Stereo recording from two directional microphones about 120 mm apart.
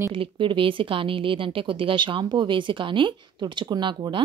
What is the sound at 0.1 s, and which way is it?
A woman's voice, 45° right (ahead or behind).